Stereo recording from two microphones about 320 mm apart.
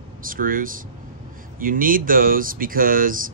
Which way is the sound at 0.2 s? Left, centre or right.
Right.